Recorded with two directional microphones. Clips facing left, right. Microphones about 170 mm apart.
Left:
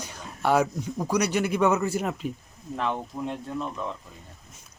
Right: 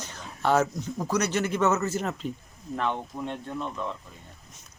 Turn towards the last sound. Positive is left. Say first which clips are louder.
# left 1 dB
turn(degrees=5)  # may be behind; listen again after turning